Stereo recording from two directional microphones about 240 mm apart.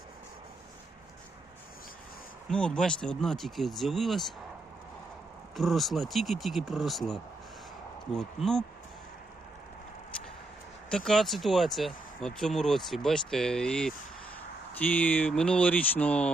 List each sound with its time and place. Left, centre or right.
2.5 s speech: centre
5.5 s speech: centre
10.9 s speech: centre